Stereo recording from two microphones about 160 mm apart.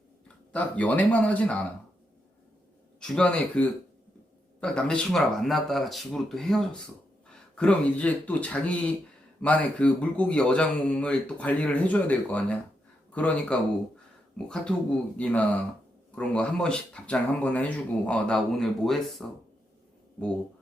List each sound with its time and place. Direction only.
0.5 s speech: 10° left (ahead or behind)
3.0 s speech: 5° left (ahead or behind)